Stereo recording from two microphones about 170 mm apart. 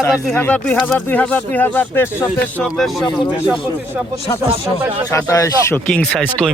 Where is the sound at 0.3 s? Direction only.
10° left (ahead or behind).